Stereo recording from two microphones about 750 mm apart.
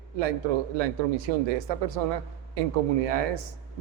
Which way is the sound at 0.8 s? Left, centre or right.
Right.